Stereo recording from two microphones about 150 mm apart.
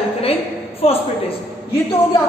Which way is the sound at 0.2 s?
40° left (ahead or behind).